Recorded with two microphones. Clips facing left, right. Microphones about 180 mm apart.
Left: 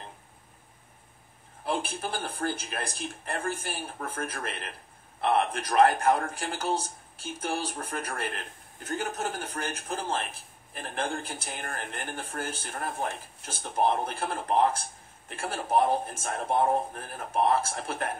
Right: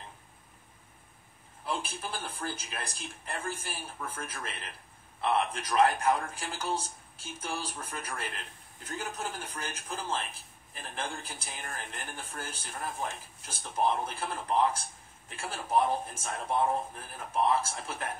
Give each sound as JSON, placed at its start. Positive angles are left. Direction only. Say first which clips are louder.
{"t": 1.7, "sound": "a man's voice", "louder": "left 5 dB", "side_deg": 60}
{"t": 9.4, "sound": "a man's voice", "louder": "left 5 dB", "side_deg": 50}